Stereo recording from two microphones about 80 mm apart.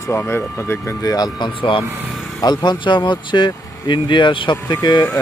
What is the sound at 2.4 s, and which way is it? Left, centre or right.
Speech, left.